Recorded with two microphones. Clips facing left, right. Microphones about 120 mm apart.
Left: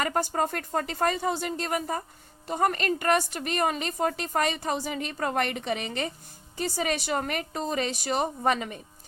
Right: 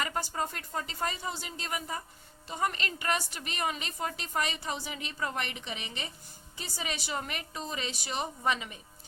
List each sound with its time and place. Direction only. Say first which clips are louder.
0.0 s a woman's voice: left 7 dB; 50° left (ahead or behind)